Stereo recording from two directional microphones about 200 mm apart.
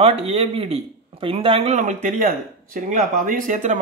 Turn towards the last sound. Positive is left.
turn(degrees=-40)  # may be behind; listen again after turning